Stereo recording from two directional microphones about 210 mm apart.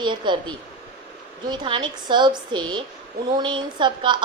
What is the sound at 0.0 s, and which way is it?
A woman's voice, 20° right (ahead or behind).